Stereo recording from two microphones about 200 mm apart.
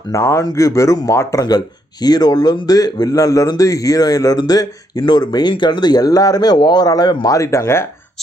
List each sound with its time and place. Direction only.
0.1 s speech: 15° left (ahead or behind)